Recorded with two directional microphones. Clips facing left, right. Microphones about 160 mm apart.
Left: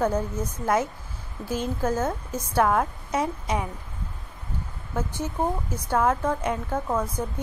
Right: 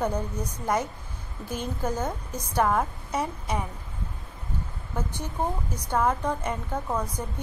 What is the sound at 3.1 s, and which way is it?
Speech, 10° left (ahead or behind).